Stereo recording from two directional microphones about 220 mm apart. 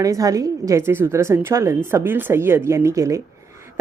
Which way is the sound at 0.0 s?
15° right (ahead or behind).